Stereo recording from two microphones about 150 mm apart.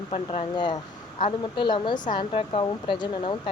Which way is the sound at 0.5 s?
30° left (ahead or behind).